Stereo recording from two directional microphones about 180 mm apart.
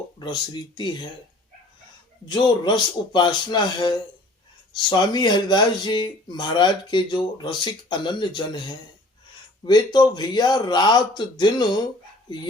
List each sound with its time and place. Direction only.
0.2 s speech: 25° left (ahead or behind)
2.2 s speech: 25° left (ahead or behind)